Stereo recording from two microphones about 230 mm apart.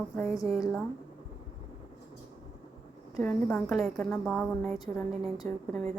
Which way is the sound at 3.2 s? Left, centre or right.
Centre.